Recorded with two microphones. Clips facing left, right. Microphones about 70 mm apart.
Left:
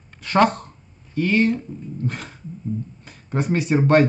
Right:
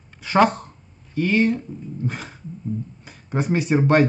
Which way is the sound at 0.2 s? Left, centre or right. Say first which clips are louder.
Even; centre.